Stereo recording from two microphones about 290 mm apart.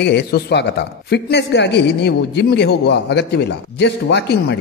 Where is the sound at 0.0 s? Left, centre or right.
Left.